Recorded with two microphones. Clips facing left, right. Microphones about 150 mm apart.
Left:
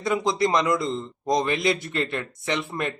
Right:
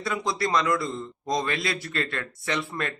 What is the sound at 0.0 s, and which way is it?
A man's voice, 20° left (ahead or behind).